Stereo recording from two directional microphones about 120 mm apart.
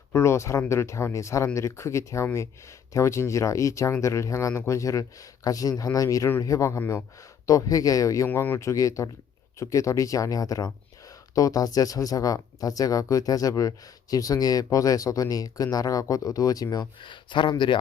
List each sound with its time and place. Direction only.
0.1 s speech: 25° left (ahead or behind)
17.0 s speech: 40° left (ahead or behind)